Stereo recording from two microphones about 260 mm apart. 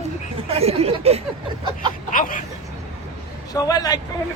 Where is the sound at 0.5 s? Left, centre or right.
Right.